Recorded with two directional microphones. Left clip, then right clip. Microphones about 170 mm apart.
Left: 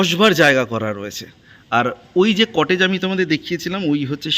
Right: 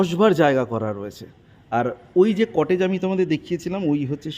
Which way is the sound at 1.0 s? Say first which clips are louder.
Left 5 dB; 5° right (ahead or behind).